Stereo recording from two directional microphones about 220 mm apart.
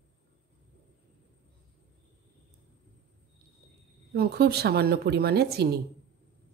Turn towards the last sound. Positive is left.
turn(degrees=-45)  # may be behind; listen again after turning